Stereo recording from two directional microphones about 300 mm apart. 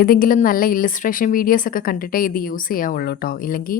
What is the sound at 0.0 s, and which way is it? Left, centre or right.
A woman's voice, left.